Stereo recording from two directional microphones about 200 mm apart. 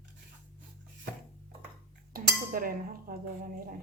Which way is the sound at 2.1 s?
45° right (ahead or behind).